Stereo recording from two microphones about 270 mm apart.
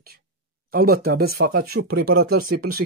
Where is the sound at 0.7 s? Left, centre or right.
Right.